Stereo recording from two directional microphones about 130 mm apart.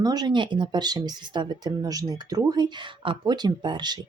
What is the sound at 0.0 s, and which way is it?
Speech, 30° right (ahead or behind).